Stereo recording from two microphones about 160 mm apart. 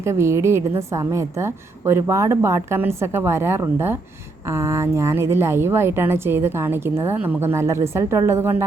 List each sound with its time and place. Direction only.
0.0 s a woman's voice: 15° right (ahead or behind)